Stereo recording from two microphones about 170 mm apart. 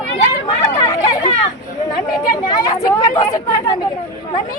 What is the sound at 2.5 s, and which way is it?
Speech, 20° left (ahead or behind).